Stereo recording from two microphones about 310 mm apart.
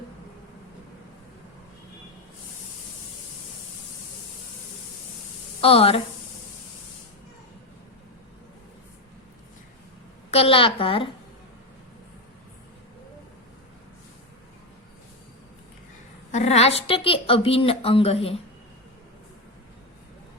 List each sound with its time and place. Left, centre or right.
5.5 s a woman's voice: centre
10.3 s a woman's voice: centre
16.3 s a woman's voice: left